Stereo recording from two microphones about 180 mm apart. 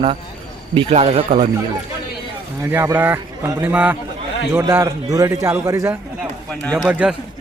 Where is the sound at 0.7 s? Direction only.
30° right (ahead or behind).